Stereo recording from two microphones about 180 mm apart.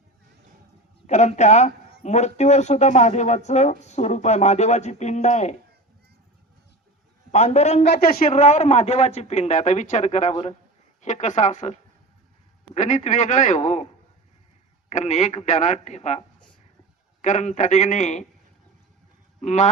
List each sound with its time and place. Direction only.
1.0 s speech: 40° left (ahead or behind)
7.3 s speech: 40° left (ahead or behind)
14.8 s speech: 40° left (ahead or behind)
19.4 s speech: 40° left (ahead or behind)